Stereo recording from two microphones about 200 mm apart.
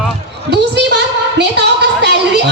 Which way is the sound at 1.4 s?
60° right (ahead or behind).